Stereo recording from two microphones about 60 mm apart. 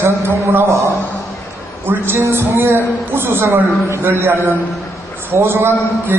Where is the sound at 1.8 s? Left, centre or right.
Right.